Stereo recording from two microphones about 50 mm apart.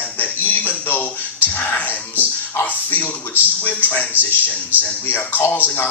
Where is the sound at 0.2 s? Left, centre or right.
Left.